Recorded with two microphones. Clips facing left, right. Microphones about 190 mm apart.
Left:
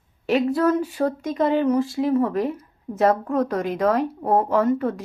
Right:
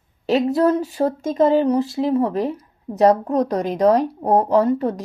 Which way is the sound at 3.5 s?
40° right (ahead or behind).